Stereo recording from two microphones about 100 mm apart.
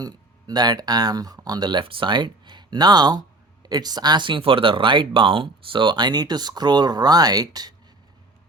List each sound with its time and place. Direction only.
0.0 s speech: 40° right (ahead or behind)
1.8 s speech: 60° right (ahead or behind); by 7.7 s 40° right (ahead or behind)